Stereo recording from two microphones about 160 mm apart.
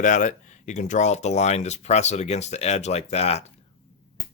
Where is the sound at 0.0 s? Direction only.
50° left (ahead or behind).